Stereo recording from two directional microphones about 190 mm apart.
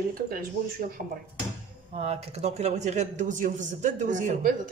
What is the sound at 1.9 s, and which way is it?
A man's voice, 35° right (ahead or behind).